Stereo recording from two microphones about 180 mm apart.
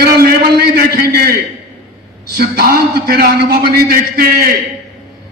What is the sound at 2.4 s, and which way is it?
A man's voice, 55° right (ahead or behind).